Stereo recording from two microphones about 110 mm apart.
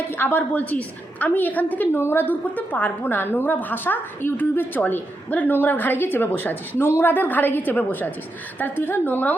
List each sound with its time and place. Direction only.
0.1 s a woman's voice: 20° left (ahead or behind)